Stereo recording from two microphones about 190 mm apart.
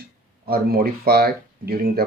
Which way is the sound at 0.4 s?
55° right (ahead or behind).